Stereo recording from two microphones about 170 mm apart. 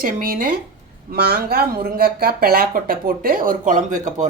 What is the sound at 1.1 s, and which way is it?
Speech, 70° right (ahead or behind).